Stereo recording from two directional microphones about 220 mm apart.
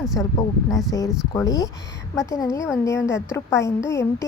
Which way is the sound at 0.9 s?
15° left (ahead or behind).